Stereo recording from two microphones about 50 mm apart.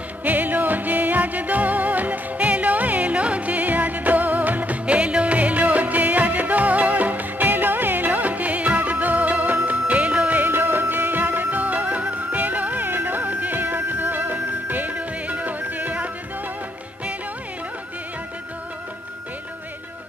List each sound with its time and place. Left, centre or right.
0.2 s music: right
15.0 s music: right